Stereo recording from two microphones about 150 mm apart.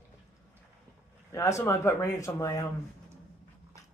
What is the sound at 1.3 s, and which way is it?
Speech, 20° left (ahead or behind).